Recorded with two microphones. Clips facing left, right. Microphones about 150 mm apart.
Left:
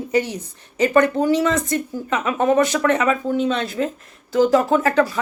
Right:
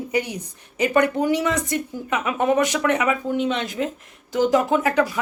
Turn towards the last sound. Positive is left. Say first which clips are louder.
# left 2 dB
turn(degrees=-15)  # may be behind; listen again after turning